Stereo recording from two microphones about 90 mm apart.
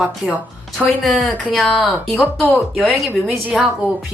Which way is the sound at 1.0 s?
Centre (ahead or behind).